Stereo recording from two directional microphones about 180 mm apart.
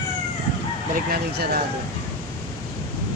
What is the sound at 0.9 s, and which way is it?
Speech, 55° right (ahead or behind).